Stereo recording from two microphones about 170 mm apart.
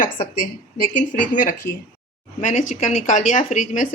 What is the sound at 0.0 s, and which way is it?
A woman's voice, 50° left (ahead or behind).